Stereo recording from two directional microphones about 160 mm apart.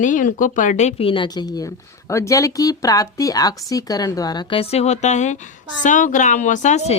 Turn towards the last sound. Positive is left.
turn(degrees=45)  # may be behind; listen again after turning